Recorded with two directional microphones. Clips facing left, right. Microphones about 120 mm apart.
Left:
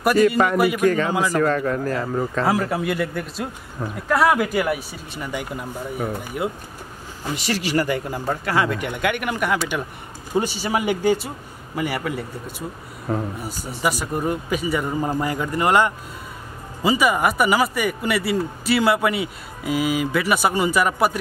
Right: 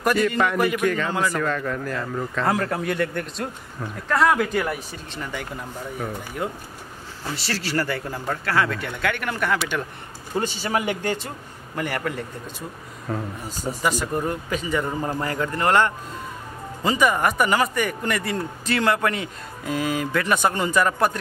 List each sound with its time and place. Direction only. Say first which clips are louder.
0.4 s speech: left 3 dB; 40° left (ahead or behind)
2.4 s speech: even; 5° left (ahead or behind)
13.1 s speech: left 4 dB; 30° left (ahead or behind)
13.8 s speech: left 2 dB; 10° left (ahead or behind)